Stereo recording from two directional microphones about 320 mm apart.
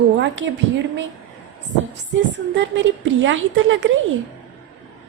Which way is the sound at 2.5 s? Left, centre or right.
Right.